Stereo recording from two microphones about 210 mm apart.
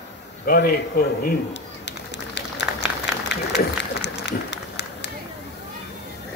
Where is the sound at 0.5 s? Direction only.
45° left (ahead or behind).